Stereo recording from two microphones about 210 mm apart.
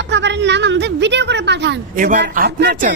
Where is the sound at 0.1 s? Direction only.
55° right (ahead or behind).